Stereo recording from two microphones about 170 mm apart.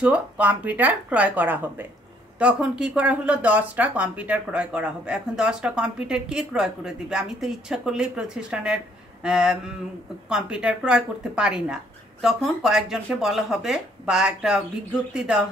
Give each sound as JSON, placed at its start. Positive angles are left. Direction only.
{"t": 0.0, "sound": "speech", "side_deg": -10}